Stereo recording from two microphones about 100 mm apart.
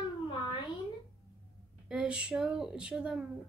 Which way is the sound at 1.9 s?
10° right (ahead or behind).